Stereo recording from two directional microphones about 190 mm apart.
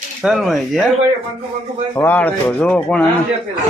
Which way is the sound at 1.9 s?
10° left (ahead or behind).